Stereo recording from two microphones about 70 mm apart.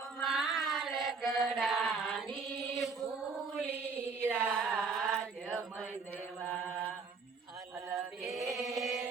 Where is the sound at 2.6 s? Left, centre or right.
Centre.